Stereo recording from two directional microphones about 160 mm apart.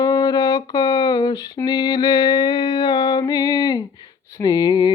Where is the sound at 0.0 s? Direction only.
25° left (ahead or behind).